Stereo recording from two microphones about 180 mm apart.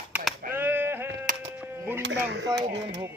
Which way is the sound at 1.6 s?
10° right (ahead or behind).